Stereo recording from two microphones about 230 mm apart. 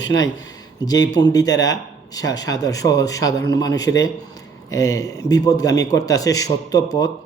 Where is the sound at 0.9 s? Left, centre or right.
Centre.